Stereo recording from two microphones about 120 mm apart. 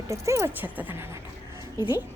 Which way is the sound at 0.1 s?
25° right (ahead or behind).